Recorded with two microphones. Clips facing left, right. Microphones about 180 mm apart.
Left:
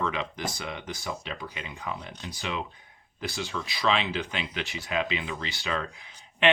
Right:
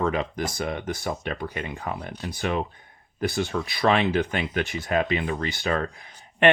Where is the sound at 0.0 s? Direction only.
45° right (ahead or behind).